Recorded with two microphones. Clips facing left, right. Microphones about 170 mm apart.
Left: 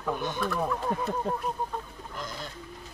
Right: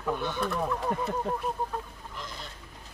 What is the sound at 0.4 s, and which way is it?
Speech, centre (ahead or behind).